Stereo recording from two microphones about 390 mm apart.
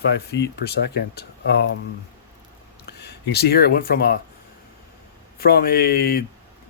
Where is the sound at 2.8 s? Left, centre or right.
Left.